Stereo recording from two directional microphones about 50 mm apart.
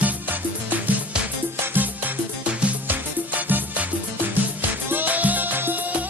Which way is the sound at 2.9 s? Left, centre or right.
Right.